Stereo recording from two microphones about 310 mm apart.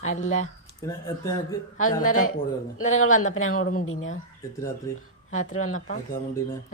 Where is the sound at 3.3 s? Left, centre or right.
Left.